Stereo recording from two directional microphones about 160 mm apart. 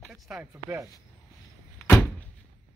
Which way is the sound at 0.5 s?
20° right (ahead or behind).